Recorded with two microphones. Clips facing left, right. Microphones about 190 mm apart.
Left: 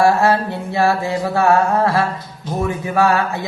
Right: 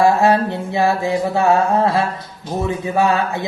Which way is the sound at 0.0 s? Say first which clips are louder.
Right 1 dB; 20° right (ahead or behind).